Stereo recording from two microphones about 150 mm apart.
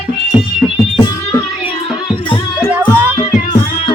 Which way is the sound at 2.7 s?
15° right (ahead or behind).